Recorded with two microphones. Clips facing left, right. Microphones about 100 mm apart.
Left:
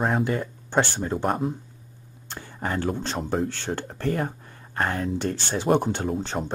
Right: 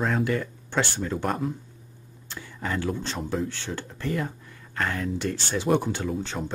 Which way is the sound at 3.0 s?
50° left (ahead or behind).